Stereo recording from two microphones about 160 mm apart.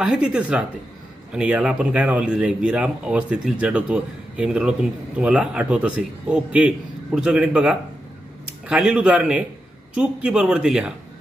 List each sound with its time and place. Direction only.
0.0 s a man's voice: 5° right (ahead or behind)